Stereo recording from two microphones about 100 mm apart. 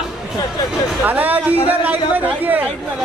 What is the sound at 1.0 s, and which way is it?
Speech, 15° right (ahead or behind).